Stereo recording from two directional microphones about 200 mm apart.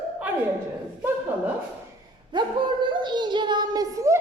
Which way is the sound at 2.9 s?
20° right (ahead or behind).